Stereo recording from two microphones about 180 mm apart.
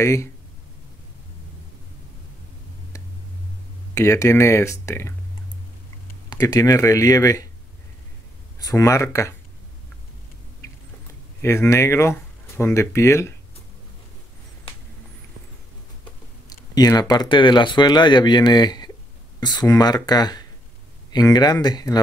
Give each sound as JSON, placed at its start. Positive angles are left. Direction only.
{"t": 0.0, "sound": "speech", "side_deg": 15}
{"t": 3.9, "sound": "speech", "side_deg": 15}
{"t": 6.3, "sound": "speech", "side_deg": 20}
{"t": 8.5, "sound": "speech", "side_deg": 20}
{"t": 11.4, "sound": "speech", "side_deg": 15}
{"t": 16.4, "sound": "clicking", "side_deg": 20}
{"t": 17.1, "sound": "speech", "side_deg": 25}